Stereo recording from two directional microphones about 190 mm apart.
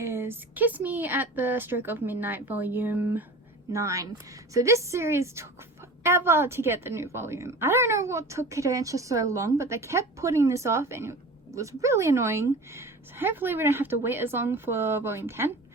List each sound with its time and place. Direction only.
0.0 s a woman's voice: 15° right (ahead or behind)